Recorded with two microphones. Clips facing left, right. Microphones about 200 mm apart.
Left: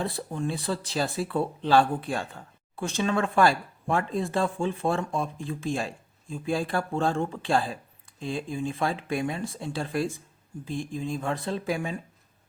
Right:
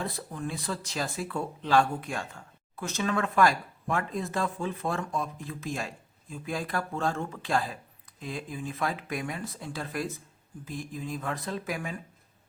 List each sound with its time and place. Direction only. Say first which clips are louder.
0.0 s speech: left 4 dB; 30° left (ahead or behind)